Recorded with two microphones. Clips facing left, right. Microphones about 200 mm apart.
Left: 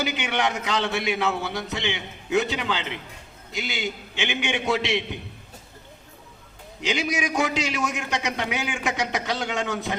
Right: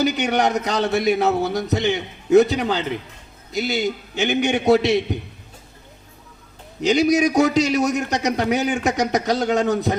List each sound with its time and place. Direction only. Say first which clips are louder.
0.0 s a man's voice: right 7 dB; 40° right (ahead or behind)
6.8 s a man's voice: right 10 dB; 40° right (ahead or behind)